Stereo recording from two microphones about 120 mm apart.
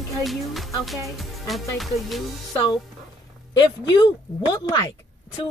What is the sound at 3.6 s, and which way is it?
A woman's voice, 40° left (ahead or behind).